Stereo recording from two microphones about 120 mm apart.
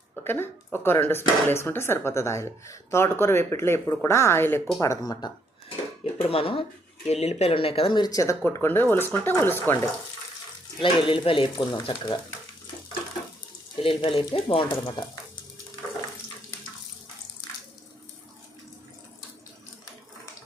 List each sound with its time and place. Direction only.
0.3 s speech: 20° left (ahead or behind)
4.8 s speech: 30° left (ahead or behind)
6.1 s speech: 50° left (ahead or behind)
7.1 s speech: 60° left (ahead or behind); by 9.9 s 20° left (ahead or behind)
10.8 s speech: 45° left (ahead or behind)
13.8 s speech: 45° left (ahead or behind)